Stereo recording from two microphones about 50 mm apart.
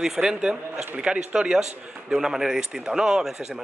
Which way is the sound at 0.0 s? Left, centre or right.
Centre.